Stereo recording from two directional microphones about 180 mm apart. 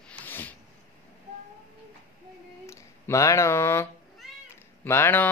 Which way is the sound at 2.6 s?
15° left (ahead or behind).